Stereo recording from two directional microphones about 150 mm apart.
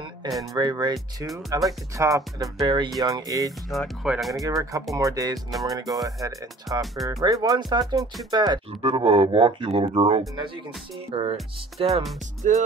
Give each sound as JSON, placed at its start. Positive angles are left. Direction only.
{"t": 0.6, "sound": "speech", "side_deg": -25}
{"t": 0.9, "sound": "speech", "side_deg": 0}
{"t": 2.0, "sound": "speech", "side_deg": -20}
{"t": 3.7, "sound": "speech", "side_deg": 0}
{"t": 4.5, "sound": "speech", "side_deg": -20}
{"t": 8.8, "sound": "speech", "side_deg": -40}
{"t": 12.4, "sound": "music", "side_deg": -55}